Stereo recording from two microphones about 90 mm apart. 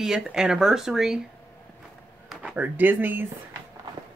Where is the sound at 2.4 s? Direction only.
15° right (ahead or behind).